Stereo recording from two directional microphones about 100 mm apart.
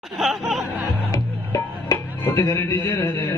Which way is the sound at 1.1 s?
35° left (ahead or behind).